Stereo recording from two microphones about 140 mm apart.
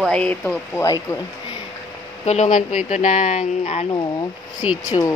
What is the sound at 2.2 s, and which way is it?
Speech, 55° left (ahead or behind).